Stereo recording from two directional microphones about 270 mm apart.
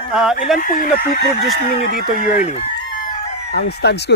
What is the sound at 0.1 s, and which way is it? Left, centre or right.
Speech, centre.